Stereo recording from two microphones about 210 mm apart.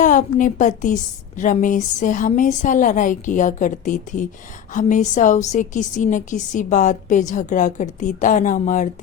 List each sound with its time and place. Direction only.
0.0 s a woman's voice: 35° left (ahead or behind)